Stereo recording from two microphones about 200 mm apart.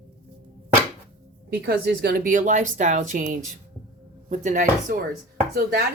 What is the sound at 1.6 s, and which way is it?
Speech, 55° right (ahead or behind).